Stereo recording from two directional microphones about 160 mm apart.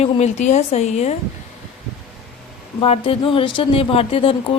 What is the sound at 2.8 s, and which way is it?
A woman's voice, 35° left (ahead or behind).